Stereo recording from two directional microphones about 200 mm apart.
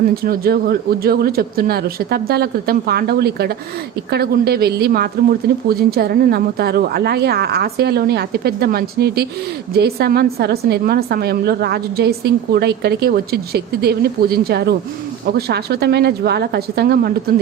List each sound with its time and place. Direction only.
0.1 s a woman's voice: 50° right (ahead or behind)